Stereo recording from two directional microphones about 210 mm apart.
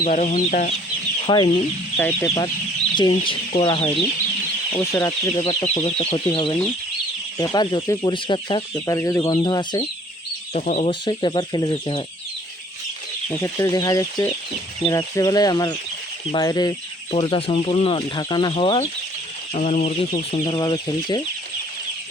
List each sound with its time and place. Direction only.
0.0 s speech: 35° left (ahead or behind)
1.3 s speech: 20° left (ahead or behind)
2.0 s speech: 10° left (ahead or behind)
3.0 s speech: 25° left (ahead or behind)
4.9 s speech: 15° left (ahead or behind)
10.5 s speech: 35° left (ahead or behind)
11.0 s speech: 20° left (ahead or behind)
13.4 s speech: 15° left (ahead or behind)